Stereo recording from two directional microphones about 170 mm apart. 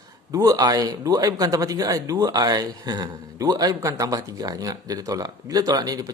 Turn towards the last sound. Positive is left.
turn(degrees=-20)  # may be behind; listen again after turning